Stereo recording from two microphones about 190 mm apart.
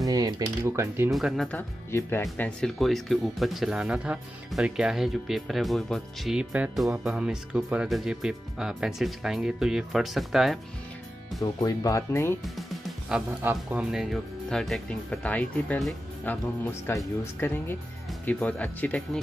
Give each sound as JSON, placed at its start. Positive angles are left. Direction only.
{"t": 0.0, "sound": "coin", "side_deg": -20}
{"t": 1.1, "sound": "speech", "side_deg": 0}
{"t": 11.6, "sound": "speech", "side_deg": 15}
{"t": 12.5, "sound": "music", "side_deg": 0}
{"t": 13.4, "sound": "speech", "side_deg": -10}